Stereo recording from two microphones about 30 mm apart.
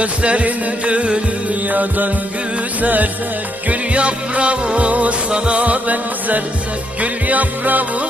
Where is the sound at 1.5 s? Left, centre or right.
Right.